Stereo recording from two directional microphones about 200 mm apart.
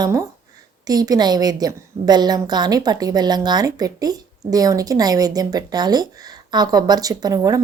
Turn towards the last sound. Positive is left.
turn(degrees=-20)  # may be behind; listen again after turning